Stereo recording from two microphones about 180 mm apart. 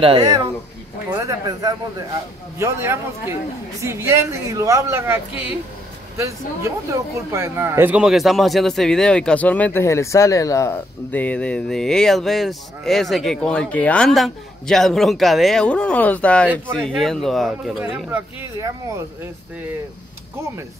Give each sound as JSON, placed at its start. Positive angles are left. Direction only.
{"t": 0.0, "sound": "speech", "side_deg": -25}
{"t": 18.6, "sound": "speech", "side_deg": -15}